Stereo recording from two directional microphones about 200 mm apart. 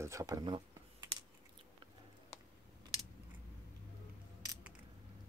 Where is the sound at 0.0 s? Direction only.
15° right (ahead or behind).